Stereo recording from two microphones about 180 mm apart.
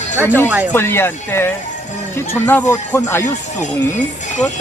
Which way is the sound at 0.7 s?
10° left (ahead or behind).